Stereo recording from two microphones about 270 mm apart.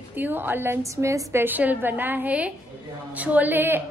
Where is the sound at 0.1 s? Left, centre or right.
Centre.